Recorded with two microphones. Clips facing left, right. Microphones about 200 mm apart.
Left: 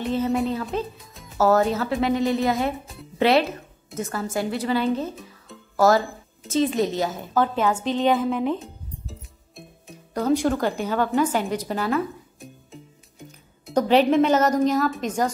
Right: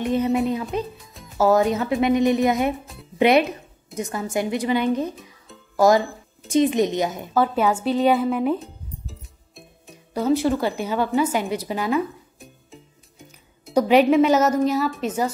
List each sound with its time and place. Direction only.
0.0 s a woman's voice: 15° right (ahead or behind)
1.4 s a woman's voice: 10° right (ahead or behind)
12.7 s music: centre (ahead or behind)
13.8 s a woman's voice: 10° right (ahead or behind)